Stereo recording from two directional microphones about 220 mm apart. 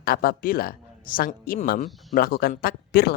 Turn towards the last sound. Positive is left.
turn(degrees=45)  # may be behind; listen again after turning